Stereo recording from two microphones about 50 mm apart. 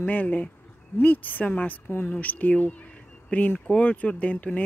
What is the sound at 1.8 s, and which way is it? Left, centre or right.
Speech, left.